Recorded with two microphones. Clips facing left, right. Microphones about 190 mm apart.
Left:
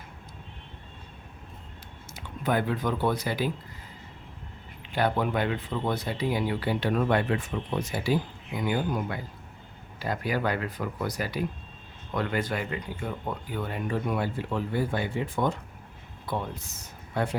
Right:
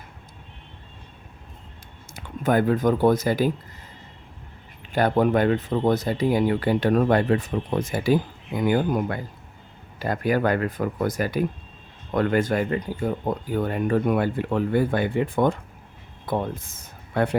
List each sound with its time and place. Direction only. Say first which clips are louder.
2.1 s speech: right 6 dB; 45° right (ahead or behind)
4.9 s speech: right 6 dB; 45° right (ahead or behind)